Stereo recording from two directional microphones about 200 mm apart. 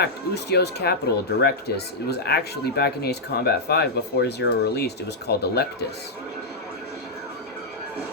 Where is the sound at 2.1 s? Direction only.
55° left (ahead or behind).